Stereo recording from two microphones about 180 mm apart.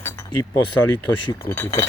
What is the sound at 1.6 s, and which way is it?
Speech, 15° left (ahead or behind).